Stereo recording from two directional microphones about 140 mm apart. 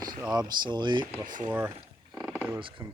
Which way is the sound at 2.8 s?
25° right (ahead or behind).